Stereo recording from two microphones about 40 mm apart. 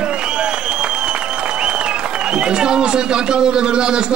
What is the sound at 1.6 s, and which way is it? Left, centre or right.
A man's voice, right.